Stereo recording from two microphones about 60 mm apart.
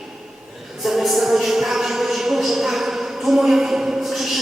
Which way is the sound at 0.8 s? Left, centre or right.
Centre.